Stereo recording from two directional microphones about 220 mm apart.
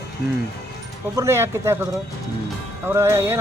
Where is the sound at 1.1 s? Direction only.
10° right (ahead or behind).